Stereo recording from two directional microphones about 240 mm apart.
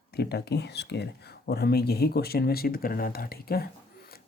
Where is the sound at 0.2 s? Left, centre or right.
Left.